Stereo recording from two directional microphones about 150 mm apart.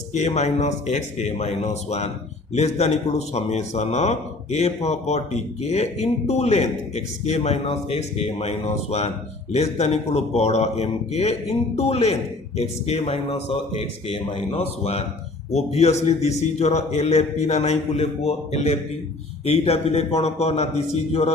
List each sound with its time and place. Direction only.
0.1 s a man's voice: 50° left (ahead or behind)